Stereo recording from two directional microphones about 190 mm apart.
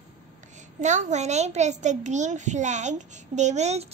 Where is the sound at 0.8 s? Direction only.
40° right (ahead or behind).